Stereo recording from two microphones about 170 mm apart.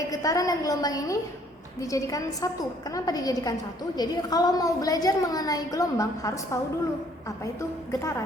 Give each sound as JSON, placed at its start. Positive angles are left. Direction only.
{"t": 0.1, "sound": "a woman's voice", "side_deg": 20}
{"t": 7.9, "sound": "speech", "side_deg": 15}